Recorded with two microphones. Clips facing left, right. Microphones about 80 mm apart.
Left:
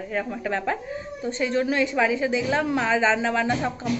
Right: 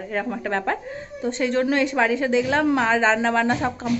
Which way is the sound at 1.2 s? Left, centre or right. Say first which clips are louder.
Right 3 dB; right.